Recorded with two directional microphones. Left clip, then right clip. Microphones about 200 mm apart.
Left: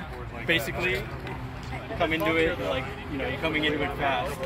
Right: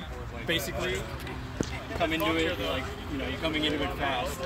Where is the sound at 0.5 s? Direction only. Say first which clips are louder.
Left 4 dB; 5° right (ahead or behind).